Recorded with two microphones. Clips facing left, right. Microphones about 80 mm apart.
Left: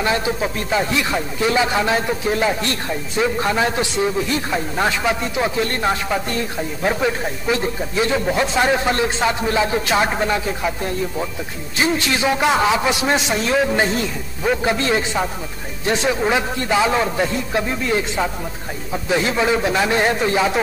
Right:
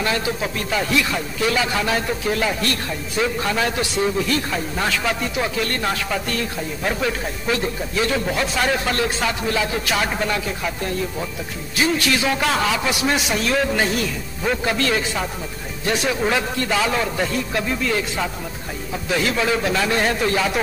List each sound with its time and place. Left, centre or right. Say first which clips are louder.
0.0 s speech: left 3 dB; left
11.8 s speech: left 1 dB; left